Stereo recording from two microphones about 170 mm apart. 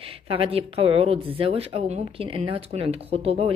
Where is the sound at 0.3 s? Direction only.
35° right (ahead or behind).